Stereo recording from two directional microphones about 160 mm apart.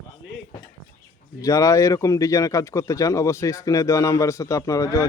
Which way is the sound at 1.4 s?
20° left (ahead or behind).